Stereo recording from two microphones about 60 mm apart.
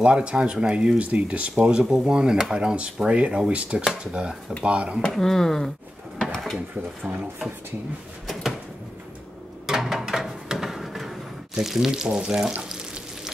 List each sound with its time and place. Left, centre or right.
0.0 s speech: centre
5.0 s speech: centre
6.2 s drawer open or close: centre
7.2 s speech: centre
8.3 s a sound: centre
9.7 s a sound: centre
12.6 s frying: centre